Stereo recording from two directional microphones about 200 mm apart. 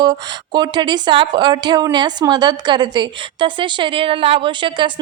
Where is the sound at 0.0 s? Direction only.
20° right (ahead or behind).